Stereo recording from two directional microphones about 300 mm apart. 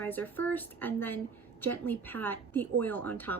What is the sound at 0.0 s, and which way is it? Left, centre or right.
Speech, centre.